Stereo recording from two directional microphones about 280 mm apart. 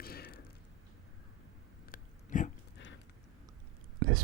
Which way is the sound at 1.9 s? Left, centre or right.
Left.